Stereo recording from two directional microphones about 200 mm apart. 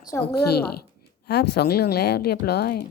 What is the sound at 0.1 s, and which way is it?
Speech, 15° left (ahead or behind).